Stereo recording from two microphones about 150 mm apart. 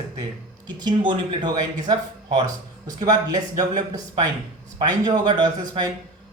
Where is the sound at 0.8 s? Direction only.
30° right (ahead or behind).